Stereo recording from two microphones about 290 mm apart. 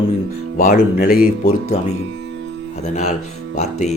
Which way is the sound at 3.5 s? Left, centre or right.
Left.